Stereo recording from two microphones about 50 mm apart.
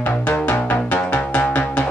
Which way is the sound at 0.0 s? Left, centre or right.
Left.